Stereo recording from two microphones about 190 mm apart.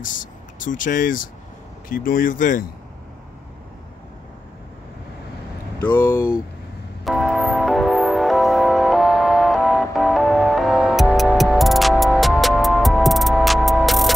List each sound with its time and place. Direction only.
0.0 s speech: 45° left (ahead or behind)
5.8 s speech: 10° left (ahead or behind)
7.1 s music: centre (ahead or behind)